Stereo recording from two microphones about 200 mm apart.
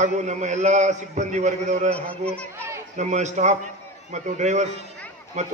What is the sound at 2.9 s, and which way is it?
A man's voice, 35° right (ahead or behind).